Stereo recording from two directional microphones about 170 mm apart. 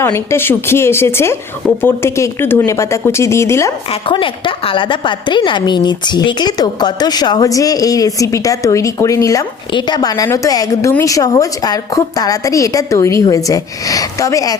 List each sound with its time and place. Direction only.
0.0 s speech: 15° left (ahead or behind)
4.0 s a woman's voice: 30° left (ahead or behind)